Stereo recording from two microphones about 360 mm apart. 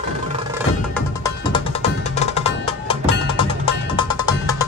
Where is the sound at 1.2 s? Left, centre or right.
Centre.